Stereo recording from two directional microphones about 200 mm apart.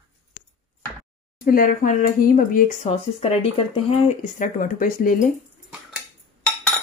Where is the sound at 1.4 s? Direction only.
45° left (ahead or behind).